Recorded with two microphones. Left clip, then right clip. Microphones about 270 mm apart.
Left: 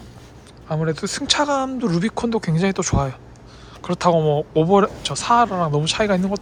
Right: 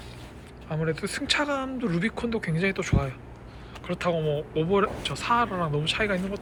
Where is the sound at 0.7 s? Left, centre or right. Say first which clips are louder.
Left 6 dB; centre.